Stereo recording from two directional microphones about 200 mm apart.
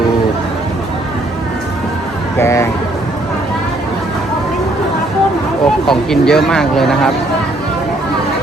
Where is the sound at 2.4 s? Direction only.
15° left (ahead or behind).